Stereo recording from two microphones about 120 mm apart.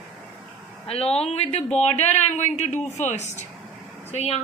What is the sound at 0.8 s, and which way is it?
A man's voice, 60° left (ahead or behind).